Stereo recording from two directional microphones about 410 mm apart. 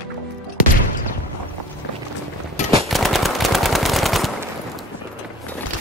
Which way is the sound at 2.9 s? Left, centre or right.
Centre.